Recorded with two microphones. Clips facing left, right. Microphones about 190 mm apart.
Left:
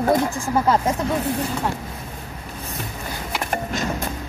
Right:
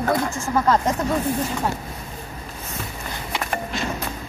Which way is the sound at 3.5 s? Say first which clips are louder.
Left 3 dB; 45° left (ahead or behind).